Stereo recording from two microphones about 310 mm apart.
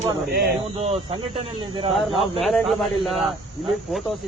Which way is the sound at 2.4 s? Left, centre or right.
Centre.